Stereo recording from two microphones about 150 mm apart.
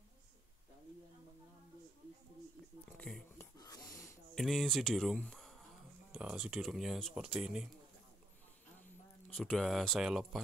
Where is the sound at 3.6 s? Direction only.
20° left (ahead or behind).